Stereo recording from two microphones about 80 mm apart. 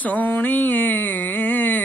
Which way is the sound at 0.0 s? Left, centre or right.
Left.